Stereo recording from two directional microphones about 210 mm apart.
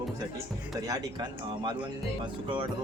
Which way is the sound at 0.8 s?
20° right (ahead or behind).